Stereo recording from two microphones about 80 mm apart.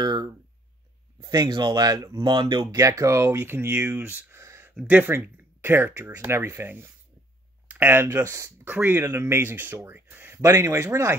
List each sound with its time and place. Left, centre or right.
0.0 s a sound: right
1.2 s speech: right
2.1 s speech: right
2.8 s speech: right
4.4 s a sound: right
4.8 s speech: right
8.6 s speech: right
10.4 s speech: right